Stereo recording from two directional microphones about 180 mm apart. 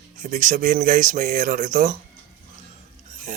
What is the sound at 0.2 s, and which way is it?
Speech, 45° right (ahead or behind).